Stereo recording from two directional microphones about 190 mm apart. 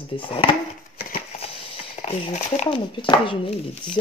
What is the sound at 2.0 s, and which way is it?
Speech, 35° left (ahead or behind).